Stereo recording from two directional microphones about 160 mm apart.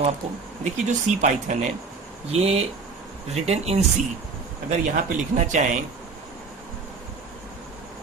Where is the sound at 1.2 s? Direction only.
50° right (ahead or behind).